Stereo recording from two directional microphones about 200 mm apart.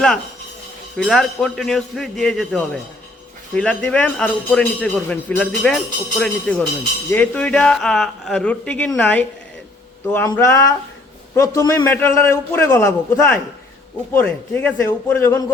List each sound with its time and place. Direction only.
0.9 s a man's voice: centre (ahead or behind)
10.2 s a man's voice: 15° left (ahead or behind)